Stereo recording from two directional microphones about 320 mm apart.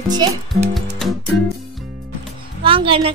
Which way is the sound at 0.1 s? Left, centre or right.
Centre.